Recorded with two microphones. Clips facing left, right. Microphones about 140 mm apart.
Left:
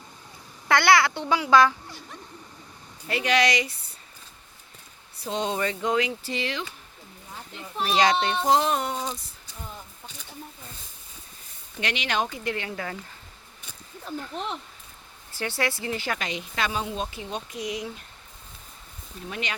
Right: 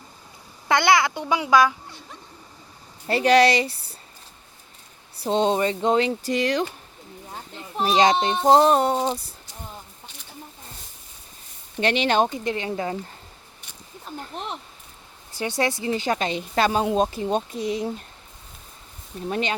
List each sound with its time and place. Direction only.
0.7 s speech: 20° right (ahead or behind)
3.1 s speech: 35° right (ahead or behind)
5.2 s speech: 25° right (ahead or behind)
6.1 s speech: 45° right (ahead or behind)
7.8 s speech: 25° right (ahead or behind)
8.5 s speech: 35° right (ahead or behind)
11.8 s speech: 30° right (ahead or behind)
15.3 s speech: 15° right (ahead or behind)
19.3 s speech: 30° right (ahead or behind)